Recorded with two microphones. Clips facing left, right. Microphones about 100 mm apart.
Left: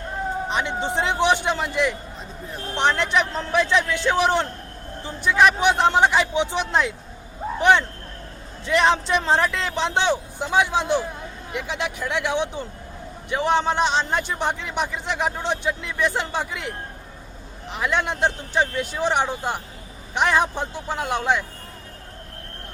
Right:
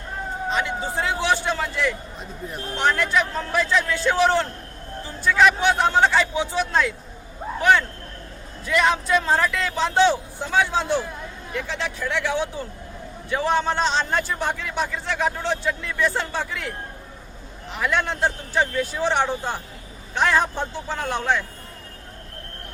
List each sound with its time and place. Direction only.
0.4 s a man's voice: 20° left (ahead or behind)
17.7 s a man's voice: 20° left (ahead or behind)